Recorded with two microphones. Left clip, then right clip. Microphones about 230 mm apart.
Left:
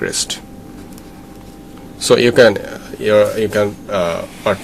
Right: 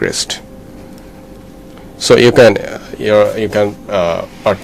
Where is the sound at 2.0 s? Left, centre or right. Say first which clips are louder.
Right 3 dB; right.